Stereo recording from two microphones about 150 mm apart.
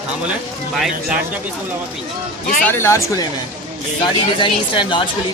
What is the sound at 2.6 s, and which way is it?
Speech, 15° left (ahead or behind).